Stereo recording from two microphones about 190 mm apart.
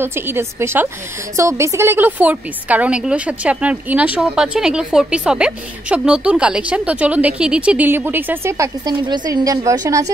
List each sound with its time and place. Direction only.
0.0 s a woman's voice: 10° right (ahead or behind)